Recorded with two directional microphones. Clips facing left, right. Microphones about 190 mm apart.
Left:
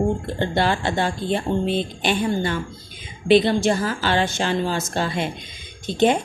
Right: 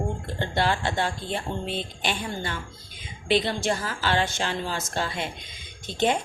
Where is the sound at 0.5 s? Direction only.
30° left (ahead or behind).